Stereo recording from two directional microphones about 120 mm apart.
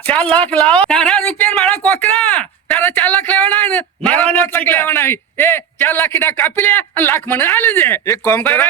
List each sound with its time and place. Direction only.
0.0 s speech: 10° left (ahead or behind)